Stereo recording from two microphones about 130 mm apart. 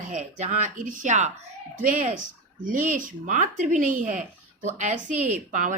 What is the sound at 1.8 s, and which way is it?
Speech, 90° right.